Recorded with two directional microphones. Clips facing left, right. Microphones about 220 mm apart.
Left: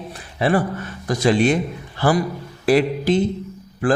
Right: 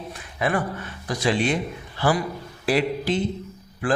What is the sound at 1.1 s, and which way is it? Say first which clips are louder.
Speech: left 6 dB; 45° left (ahead or behind).